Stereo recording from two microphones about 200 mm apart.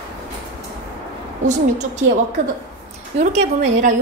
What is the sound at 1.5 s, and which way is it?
A woman's voice, 35° right (ahead or behind).